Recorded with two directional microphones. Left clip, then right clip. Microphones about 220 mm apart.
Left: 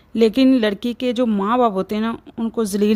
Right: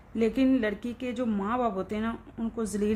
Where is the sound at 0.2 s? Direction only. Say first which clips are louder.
Left 10 dB; 45° left (ahead or behind).